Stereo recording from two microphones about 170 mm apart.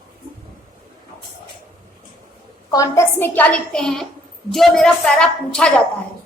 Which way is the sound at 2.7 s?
20° left (ahead or behind).